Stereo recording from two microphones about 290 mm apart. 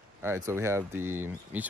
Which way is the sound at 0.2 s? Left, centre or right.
Centre.